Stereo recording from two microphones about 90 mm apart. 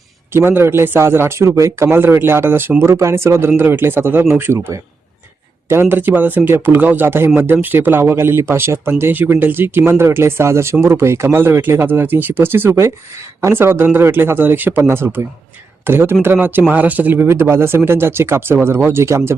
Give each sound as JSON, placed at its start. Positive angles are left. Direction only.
{"t": 0.3, "sound": "speech", "side_deg": -25}
{"t": 5.6, "sound": "speech", "side_deg": -25}